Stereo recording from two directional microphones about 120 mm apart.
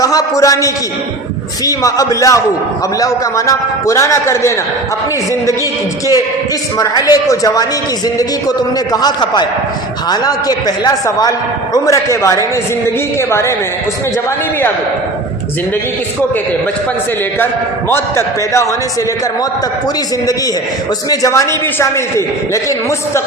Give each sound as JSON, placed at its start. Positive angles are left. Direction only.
{"t": 0.0, "sound": "a man's voice", "side_deg": 30}
{"t": 6.7, "sound": "a man's voice", "side_deg": 30}
{"t": 17.4, "sound": "a man's voice", "side_deg": 20}
{"t": 21.1, "sound": "a man's voice", "side_deg": 25}